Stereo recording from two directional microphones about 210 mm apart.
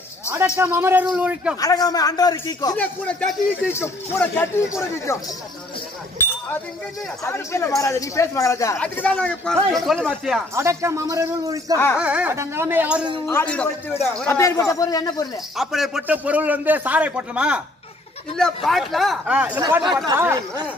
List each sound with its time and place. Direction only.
0.6 s a man's voice: 10° right (ahead or behind)
1.6 s speech: 15° left (ahead or behind)
2.8 s speech: 5° left (ahead or behind)
6.2 s chink: 10° left (ahead or behind)
7.2 s speech: 10° left (ahead or behind)
10.5 s a man's voice: 15° right (ahead or behind)
12.0 s a man's voice: 5° right (ahead or behind)
13.3 s speech: 10° left (ahead or behind)
15.5 s a man's voice: centre (ahead or behind)
18.7 s speech: centre (ahead or behind)
19.6 s a man's voice: 20° right (ahead or behind)